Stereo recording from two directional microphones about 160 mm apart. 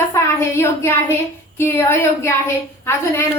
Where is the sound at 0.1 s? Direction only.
15° left (ahead or behind).